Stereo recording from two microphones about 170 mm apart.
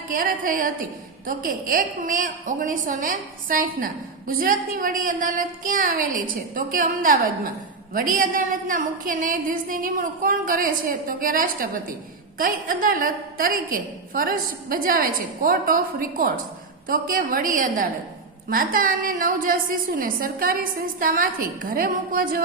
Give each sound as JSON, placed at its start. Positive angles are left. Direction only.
{"t": 0.1, "sound": "a woman's voice", "side_deg": -55}